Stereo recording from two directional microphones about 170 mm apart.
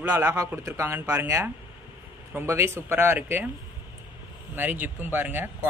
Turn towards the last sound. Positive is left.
turn(degrees=-10)  # may be behind; listen again after turning